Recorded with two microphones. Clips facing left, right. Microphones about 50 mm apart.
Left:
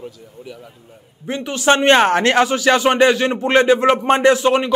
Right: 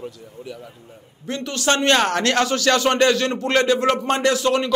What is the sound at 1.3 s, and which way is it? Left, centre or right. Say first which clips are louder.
A man's voice: left 5 dB; centre.